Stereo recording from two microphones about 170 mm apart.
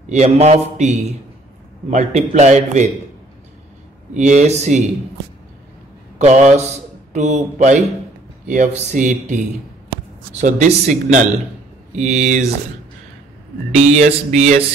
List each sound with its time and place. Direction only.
0.1 s a man's voice: 40° right (ahead or behind)
4.1 s a man's voice: 45° right (ahead or behind)
6.1 s a man's voice: 45° right (ahead or behind)
10.4 s a man's voice: 45° right (ahead or behind)
13.7 s a man's voice: 40° right (ahead or behind)